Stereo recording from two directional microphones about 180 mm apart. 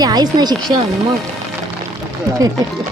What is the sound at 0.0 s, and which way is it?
Speech, 20° right (ahead or behind).